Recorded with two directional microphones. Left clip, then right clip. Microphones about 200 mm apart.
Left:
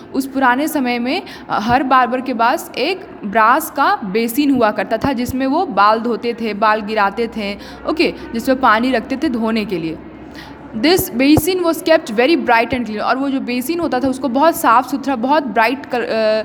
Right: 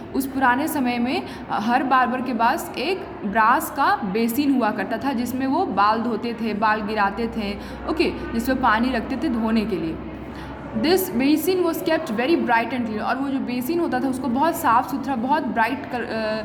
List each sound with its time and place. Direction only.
0.1 s a woman's voice: 30° left (ahead or behind)